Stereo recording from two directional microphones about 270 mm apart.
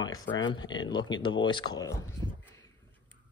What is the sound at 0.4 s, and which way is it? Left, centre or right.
Speech, centre.